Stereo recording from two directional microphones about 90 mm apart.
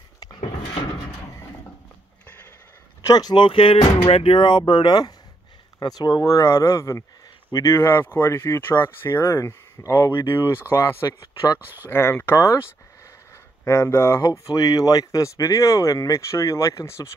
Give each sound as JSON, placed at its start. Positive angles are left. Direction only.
{"t": 3.0, "sound": "speech", "side_deg": 45}
{"t": 3.4, "sound": "speech", "side_deg": 85}
{"t": 11.1, "sound": "speech", "side_deg": 45}
{"t": 11.9, "sound": "speech", "side_deg": 25}
{"t": 13.7, "sound": "speech", "side_deg": 30}